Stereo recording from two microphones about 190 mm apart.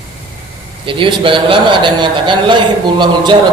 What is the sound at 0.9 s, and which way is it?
A man's voice, 25° right (ahead or behind).